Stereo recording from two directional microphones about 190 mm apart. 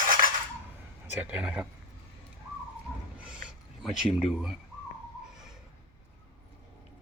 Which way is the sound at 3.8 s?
Centre (ahead or behind).